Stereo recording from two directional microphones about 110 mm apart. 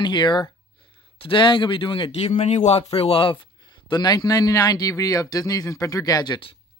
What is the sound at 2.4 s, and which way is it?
Speech, 90° left.